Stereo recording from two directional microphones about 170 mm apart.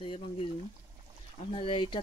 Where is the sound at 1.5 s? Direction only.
35° left (ahead or behind).